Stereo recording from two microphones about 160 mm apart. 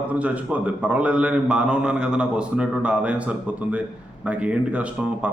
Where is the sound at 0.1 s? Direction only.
10° right (ahead or behind).